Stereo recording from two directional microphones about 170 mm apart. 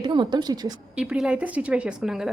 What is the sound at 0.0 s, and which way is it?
Speech, 25° right (ahead or behind).